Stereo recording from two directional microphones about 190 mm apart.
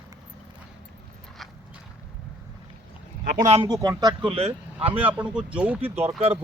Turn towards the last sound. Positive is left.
turn(degrees=-10)  # may be behind; listen again after turning